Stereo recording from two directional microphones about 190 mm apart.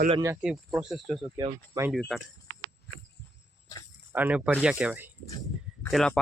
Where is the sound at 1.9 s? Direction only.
Centre (ahead or behind).